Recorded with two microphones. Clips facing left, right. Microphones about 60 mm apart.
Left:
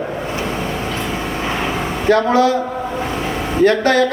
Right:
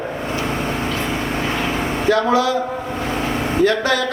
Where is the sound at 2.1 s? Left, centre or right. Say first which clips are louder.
Left 3 dB; left.